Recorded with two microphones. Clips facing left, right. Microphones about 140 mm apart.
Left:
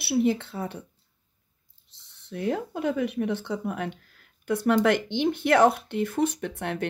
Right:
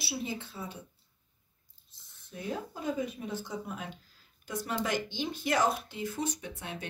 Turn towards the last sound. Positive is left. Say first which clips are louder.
# left 11 dB
turn(degrees=65)  # may be behind; listen again after turning